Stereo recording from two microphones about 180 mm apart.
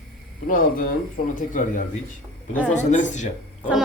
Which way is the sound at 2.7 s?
40° left (ahead or behind).